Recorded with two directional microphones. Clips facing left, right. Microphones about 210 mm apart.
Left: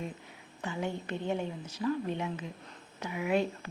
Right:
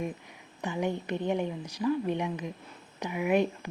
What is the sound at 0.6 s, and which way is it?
A woman's voice, 15° right (ahead or behind).